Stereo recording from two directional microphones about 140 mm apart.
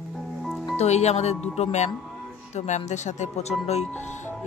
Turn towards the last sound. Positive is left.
turn(degrees=50)  # may be behind; listen again after turning